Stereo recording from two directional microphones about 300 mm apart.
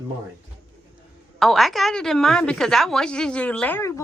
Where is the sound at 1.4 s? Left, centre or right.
Centre.